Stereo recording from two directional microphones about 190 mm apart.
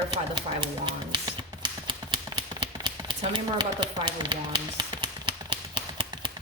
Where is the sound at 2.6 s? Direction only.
25° right (ahead or behind).